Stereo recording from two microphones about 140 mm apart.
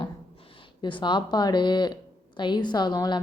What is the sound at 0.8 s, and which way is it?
Speech, 35° left (ahead or behind).